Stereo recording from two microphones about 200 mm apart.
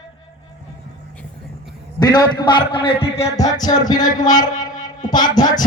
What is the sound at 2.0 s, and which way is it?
A man's voice, 20° left (ahead or behind).